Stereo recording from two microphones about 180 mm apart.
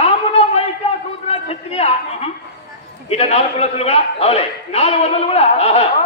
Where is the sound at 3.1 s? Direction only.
35° left (ahead or behind).